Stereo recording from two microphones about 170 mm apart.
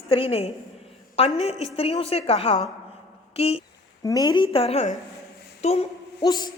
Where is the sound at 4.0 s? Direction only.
20° left (ahead or behind); by 5.8 s 40° left (ahead or behind).